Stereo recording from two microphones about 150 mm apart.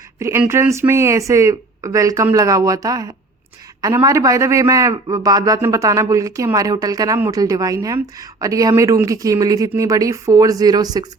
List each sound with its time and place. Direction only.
0.2 s speech: 20° right (ahead or behind)